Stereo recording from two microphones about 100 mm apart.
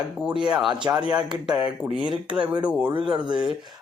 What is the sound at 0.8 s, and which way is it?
Speech, 45° right (ahead or behind).